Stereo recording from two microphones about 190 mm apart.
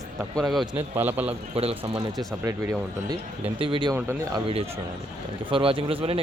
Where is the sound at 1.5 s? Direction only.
30° right (ahead or behind).